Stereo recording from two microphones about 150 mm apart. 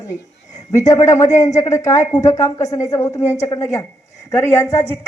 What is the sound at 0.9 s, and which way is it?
Speech, 20° left (ahead or behind).